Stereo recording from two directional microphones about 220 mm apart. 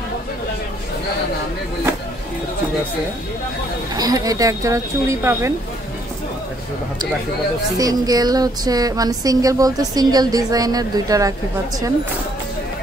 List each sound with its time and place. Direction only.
3.9 s speech: 15° right (ahead or behind)
7.7 s speech: 15° right (ahead or behind)